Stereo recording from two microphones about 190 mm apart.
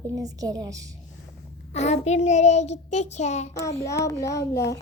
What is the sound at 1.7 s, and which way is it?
Child singing, 35° left (ahead or behind).